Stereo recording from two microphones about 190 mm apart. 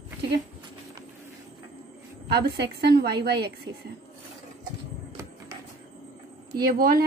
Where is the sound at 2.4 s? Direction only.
55° right (ahead or behind).